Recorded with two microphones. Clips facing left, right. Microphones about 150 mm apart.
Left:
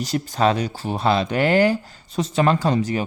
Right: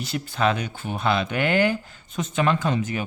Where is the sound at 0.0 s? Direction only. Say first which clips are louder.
Left 4 dB; 40° left (ahead or behind).